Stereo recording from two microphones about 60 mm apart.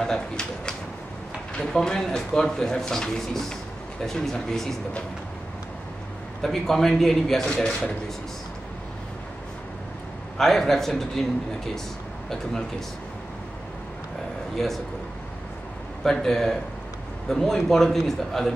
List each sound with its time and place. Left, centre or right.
0.0 s a man's voice: centre
6.4 s a man's voice: centre
7.4 s a man's voice: centre
10.3 s a man's voice: centre
14.5 s a man's voice: centre
16.0 s a man's voice: centre